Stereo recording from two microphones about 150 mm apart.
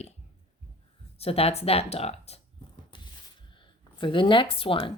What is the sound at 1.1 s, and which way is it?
Speech, 40° left (ahead or behind).